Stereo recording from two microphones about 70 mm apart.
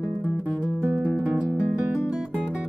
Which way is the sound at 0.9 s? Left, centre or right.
Right.